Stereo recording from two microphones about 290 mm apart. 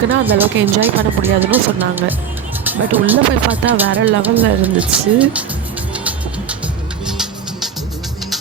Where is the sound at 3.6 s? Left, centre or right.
Right.